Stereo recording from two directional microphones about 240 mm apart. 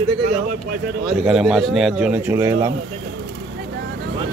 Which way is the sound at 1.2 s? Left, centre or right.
Centre.